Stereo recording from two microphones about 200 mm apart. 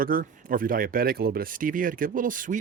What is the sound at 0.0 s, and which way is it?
Speech, 45° right (ahead or behind).